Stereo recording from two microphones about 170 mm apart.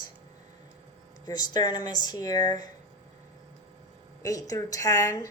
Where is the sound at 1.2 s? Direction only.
25° left (ahead or behind).